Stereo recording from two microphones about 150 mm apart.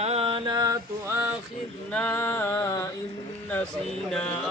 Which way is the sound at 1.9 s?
10° left (ahead or behind).